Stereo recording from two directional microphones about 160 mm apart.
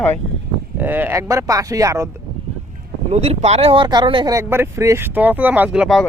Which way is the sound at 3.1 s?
40° right (ahead or behind).